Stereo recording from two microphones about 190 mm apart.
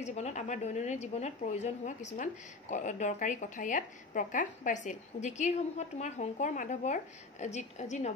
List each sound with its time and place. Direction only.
0.0 s a woman's voice: 35° left (ahead or behind)